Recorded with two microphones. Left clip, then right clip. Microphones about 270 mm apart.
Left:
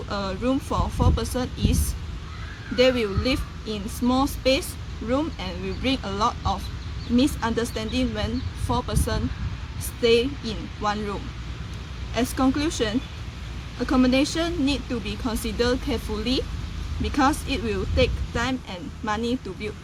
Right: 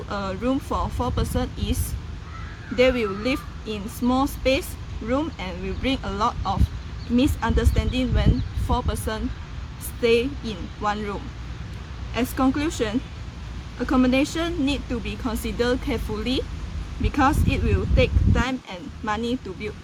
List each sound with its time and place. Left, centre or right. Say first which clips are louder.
0.1 s speech: even; centre